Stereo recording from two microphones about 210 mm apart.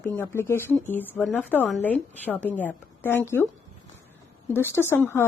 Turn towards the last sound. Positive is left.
turn(degrees=10)  # may be behind; listen again after turning